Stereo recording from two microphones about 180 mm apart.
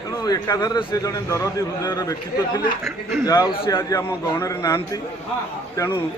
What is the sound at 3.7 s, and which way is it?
A man's voice, 15° left (ahead or behind).